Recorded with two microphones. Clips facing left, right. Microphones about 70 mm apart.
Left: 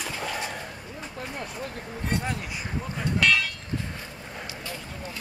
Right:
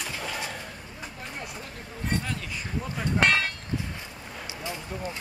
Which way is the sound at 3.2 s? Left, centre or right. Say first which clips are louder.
Even; right.